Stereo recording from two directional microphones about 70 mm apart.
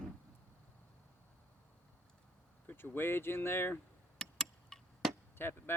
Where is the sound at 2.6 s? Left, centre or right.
Left.